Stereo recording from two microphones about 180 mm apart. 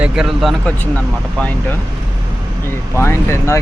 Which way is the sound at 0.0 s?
5° right (ahead or behind).